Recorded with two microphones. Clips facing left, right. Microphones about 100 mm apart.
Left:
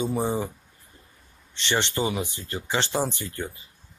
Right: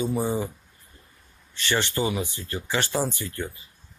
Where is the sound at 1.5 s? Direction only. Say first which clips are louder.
Even; 20° left (ahead or behind).